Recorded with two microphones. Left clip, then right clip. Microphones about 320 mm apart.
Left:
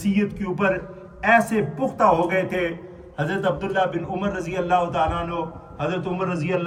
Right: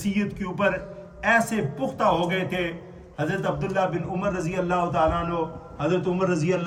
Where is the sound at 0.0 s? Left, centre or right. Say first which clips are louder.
Left 4 dB; centre.